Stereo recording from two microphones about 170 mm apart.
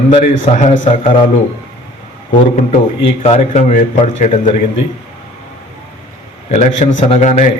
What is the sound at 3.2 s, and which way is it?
A man's voice, 45° left (ahead or behind).